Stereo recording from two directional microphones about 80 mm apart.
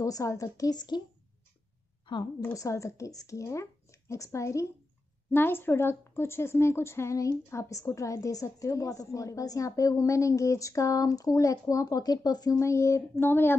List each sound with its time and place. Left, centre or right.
0.0 s a woman's voice: left
2.5 s speech: left
5.3 s a woman's voice: left
12.5 s speech: left